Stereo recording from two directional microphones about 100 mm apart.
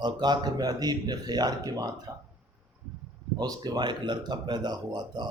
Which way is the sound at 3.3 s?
40° right (ahead or behind).